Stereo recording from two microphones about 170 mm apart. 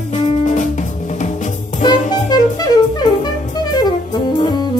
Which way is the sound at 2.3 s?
25° left (ahead or behind).